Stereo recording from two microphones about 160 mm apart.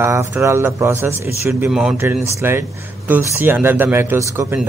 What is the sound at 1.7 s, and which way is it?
Speech, centre (ahead or behind).